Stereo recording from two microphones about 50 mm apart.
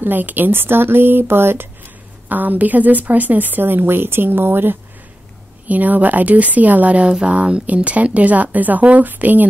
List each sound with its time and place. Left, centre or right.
0.0 s speech: right
2.2 s speech: right
5.7 s speech: right